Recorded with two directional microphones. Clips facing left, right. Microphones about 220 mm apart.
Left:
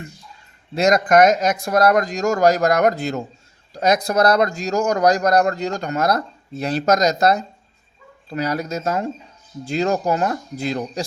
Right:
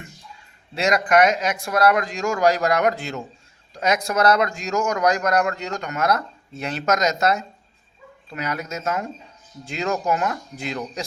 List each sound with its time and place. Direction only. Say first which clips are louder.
0.7 s speech: left 4 dB; 40° left (ahead or behind)